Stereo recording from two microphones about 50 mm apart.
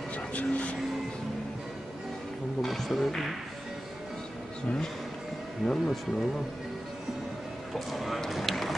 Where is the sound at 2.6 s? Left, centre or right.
Centre.